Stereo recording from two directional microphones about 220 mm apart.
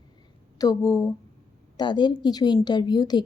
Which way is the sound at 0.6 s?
15° left (ahead or behind).